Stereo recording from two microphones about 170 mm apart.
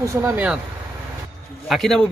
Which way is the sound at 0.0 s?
20° right (ahead or behind).